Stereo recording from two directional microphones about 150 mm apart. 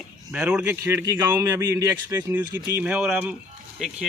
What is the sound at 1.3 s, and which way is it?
A man's voice, 20° right (ahead or behind).